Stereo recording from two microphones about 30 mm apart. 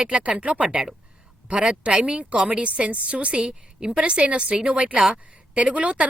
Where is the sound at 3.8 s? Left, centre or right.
Right.